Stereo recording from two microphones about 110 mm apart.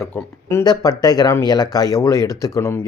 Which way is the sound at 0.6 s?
35° left (ahead or behind).